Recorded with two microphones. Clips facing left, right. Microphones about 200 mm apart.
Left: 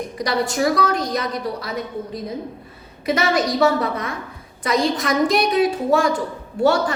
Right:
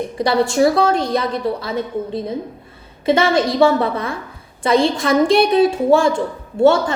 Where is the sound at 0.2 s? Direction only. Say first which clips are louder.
Right 6 dB; 30° right (ahead or behind).